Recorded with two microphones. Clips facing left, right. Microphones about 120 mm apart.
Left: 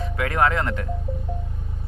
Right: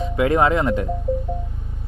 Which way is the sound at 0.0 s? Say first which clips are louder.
Right 4 dB; 20° right (ahead or behind).